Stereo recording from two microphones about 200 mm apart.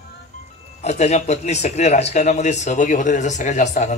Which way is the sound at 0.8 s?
35° left (ahead or behind).